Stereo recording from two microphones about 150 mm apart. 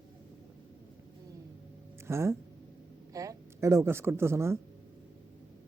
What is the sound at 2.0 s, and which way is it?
Speech, 20° right (ahead or behind).